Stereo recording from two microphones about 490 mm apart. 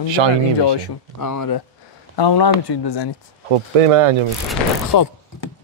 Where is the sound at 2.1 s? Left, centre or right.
Left.